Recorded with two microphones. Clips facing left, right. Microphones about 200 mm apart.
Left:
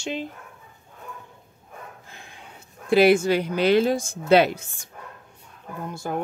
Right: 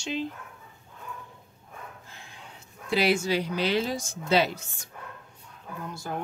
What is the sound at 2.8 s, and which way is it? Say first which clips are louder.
Speech: left 8 dB; 55° left (ahead or behind).